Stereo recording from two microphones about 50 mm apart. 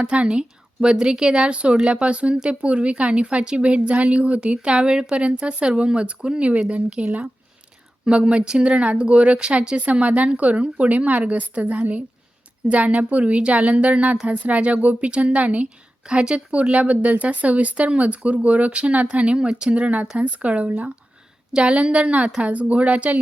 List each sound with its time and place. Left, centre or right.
0.0 s a woman's voice: right
8.0 s a woman's voice: centre